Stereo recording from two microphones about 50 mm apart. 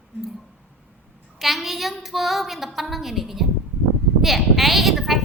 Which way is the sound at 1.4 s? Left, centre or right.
Centre.